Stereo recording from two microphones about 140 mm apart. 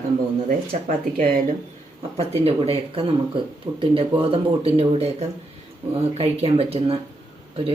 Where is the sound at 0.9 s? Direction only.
85° right.